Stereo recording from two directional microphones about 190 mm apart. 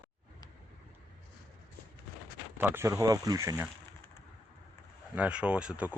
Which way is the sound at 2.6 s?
10° right (ahead or behind).